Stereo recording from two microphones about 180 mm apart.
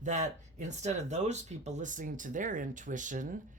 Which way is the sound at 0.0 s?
40° right (ahead or behind).